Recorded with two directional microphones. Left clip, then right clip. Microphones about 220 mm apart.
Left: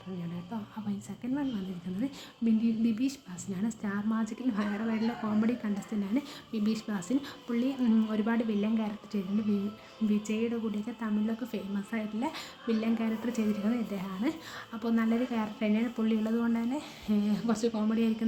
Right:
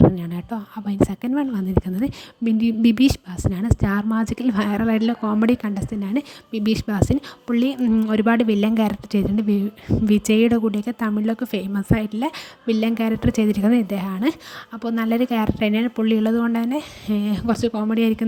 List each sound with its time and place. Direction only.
0.5 s a woman's voice: 40° right (ahead or behind)